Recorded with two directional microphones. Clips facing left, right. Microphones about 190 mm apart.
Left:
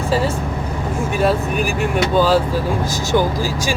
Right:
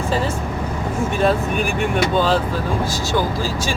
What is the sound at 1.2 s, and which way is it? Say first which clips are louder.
Speech: left 1 dB; 5° left (ahead or behind).